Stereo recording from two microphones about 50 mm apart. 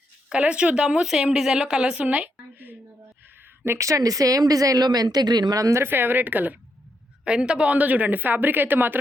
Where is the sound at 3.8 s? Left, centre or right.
Right.